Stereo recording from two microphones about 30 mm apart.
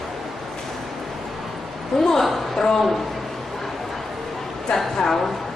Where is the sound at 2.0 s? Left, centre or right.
Centre.